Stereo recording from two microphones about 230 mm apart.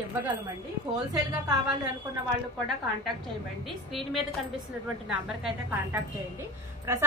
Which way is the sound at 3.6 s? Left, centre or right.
Centre.